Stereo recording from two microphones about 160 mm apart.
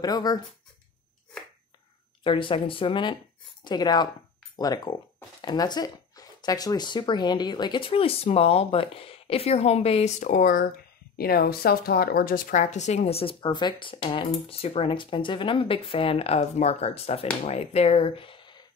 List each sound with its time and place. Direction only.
0.0 s speech: 25° left (ahead or behind)
2.2 s a woman's voice: 30° left (ahead or behind)
10.3 s speech: 60° left (ahead or behind)
11.1 s a woman's voice: 75° left (ahead or behind); by 18.6 s 30° left (ahead or behind)